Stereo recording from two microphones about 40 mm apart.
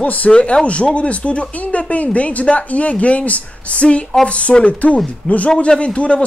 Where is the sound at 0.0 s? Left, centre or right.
Left.